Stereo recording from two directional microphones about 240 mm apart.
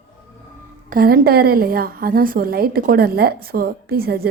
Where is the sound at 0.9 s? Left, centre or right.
Right.